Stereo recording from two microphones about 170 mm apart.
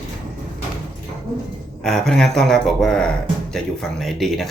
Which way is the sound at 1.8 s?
Centre (ahead or behind).